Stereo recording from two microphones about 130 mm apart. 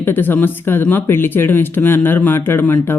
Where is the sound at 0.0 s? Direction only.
15° left (ahead or behind).